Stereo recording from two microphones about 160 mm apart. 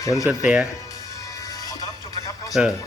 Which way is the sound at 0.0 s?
20° left (ahead or behind).